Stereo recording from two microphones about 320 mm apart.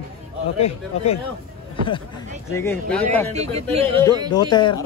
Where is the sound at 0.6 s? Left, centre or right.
Centre.